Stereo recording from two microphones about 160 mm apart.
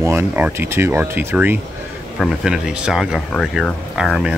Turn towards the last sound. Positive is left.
turn(degrees=0)  # may be behind; listen again after turning